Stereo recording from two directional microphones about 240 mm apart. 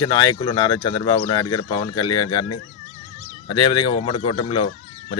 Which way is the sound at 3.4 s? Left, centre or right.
Centre.